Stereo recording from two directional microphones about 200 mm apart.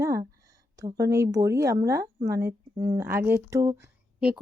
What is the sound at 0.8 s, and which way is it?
A woman's voice, 15° right (ahead or behind).